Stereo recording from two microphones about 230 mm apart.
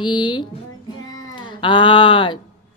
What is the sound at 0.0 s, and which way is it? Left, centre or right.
Speech, centre.